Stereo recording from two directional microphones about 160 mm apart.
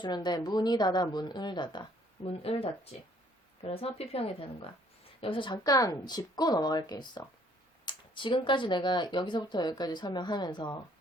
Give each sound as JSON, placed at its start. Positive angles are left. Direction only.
{"t": 0.0, "sound": "speech", "side_deg": 25}